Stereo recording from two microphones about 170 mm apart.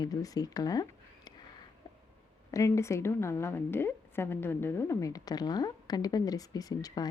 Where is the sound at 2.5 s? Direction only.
20° left (ahead or behind).